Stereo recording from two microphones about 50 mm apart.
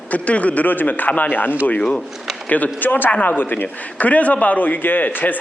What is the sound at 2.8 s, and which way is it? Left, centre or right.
A man's voice, left.